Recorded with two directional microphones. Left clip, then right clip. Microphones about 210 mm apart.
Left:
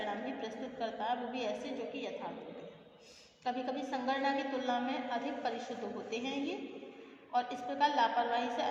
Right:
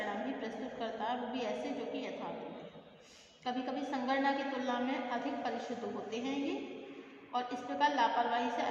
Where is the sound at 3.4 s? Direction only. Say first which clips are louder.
Left 1 dB; 30° left (ahead or behind).